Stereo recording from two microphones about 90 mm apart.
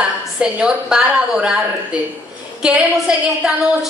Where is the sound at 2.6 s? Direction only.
15° right (ahead or behind).